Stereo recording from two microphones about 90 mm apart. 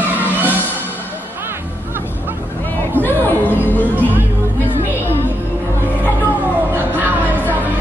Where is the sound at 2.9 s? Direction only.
20° left (ahead or behind).